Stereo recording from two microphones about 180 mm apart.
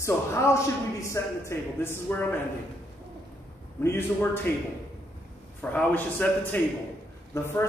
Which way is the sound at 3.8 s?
15° left (ahead or behind).